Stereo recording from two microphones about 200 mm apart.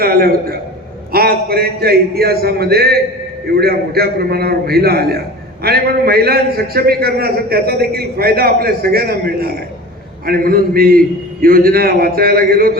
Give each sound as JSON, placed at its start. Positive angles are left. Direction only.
{"t": 0.0, "sound": "a man's voice", "side_deg": -50}